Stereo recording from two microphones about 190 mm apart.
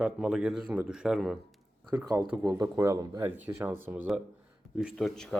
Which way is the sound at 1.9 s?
20° right (ahead or behind).